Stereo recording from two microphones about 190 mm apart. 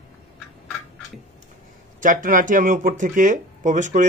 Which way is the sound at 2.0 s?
45° right (ahead or behind).